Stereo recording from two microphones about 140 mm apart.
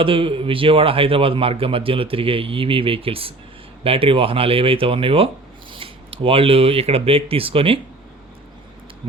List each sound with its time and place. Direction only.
0.0 s a man's voice: 40° right (ahead or behind)